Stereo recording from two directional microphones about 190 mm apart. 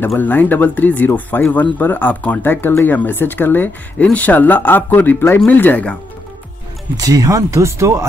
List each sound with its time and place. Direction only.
0.0 s speech: 10° left (ahead or behind)
7.0 s speech: 20° right (ahead or behind)